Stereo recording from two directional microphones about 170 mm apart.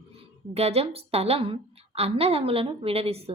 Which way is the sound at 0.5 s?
40° right (ahead or behind).